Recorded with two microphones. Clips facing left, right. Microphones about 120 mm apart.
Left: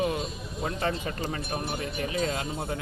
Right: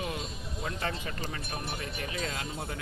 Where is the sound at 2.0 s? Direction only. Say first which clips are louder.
Left 8 dB; 30° left (ahead or behind).